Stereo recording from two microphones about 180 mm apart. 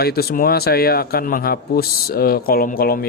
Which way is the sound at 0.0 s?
60° left (ahead or behind).